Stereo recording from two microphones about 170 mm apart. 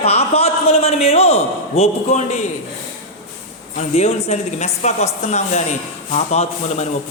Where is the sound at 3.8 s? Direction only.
40° left (ahead or behind).